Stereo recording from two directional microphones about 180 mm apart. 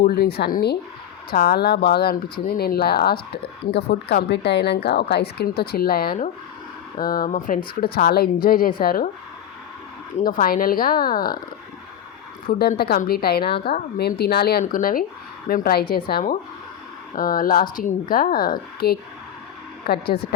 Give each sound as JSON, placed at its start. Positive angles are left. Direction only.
{"t": 0.0, "sound": "a woman's voice", "side_deg": 60}
{"t": 7.9, "sound": "speech", "side_deg": 60}
{"t": 10.2, "sound": "a woman's voice", "side_deg": 50}
{"t": 12.5, "sound": "a woman's voice", "side_deg": 60}